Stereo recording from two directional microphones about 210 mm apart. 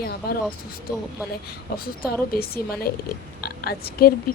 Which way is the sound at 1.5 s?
45° left (ahead or behind).